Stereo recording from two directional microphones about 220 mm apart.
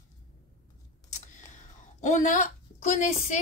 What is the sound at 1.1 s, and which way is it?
Speech, 35° left (ahead or behind).